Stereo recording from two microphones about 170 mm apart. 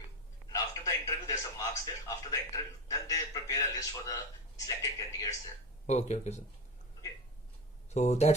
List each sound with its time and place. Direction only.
0.4 s a man's voice: 20° left (ahead or behind)
5.8 s speech: 40° left (ahead or behind)
7.9 s speech: 40° left (ahead or behind)